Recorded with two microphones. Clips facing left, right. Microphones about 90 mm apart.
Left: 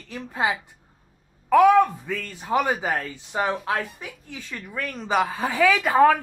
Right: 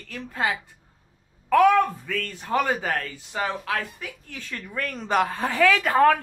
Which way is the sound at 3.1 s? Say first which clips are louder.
Left 3 dB; 25° left (ahead or behind).